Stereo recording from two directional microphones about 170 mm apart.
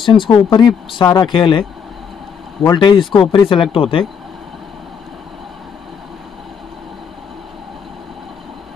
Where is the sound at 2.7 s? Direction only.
30° left (ahead or behind).